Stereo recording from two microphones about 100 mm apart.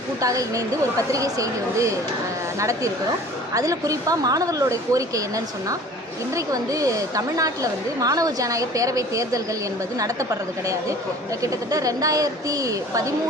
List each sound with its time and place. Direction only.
0.2 s a woman's voice: 35° right (ahead or behind)
6.3 s a woman's voice: 35° right (ahead or behind)
11.4 s a woman's voice: 35° right (ahead or behind)